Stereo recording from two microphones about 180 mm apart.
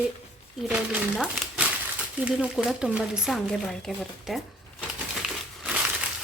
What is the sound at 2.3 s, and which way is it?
Speech, 5° right (ahead or behind).